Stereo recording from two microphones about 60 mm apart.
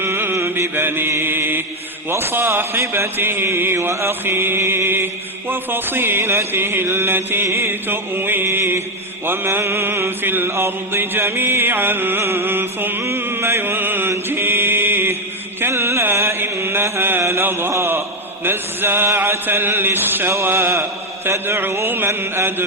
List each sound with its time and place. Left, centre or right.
0.0 s mantra: right
14.1 s chant: right
15.6 s mantra: right
17.4 s a sound: right
18.4 s chant: right
20.3 s mantra: right